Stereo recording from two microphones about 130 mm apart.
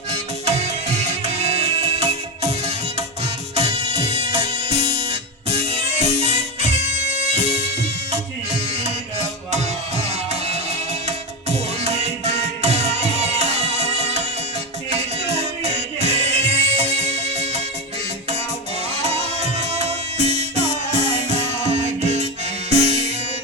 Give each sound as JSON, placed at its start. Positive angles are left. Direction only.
{"t": 0.1, "sound": "music", "side_deg": -55}
{"t": 18.9, "sound": "music", "side_deg": -55}